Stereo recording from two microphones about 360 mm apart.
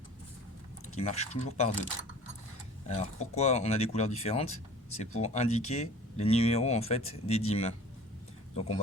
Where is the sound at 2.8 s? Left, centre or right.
Centre.